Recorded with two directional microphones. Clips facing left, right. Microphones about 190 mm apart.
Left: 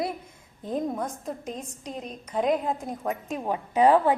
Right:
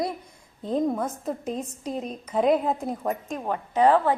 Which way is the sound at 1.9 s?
35° right (ahead or behind).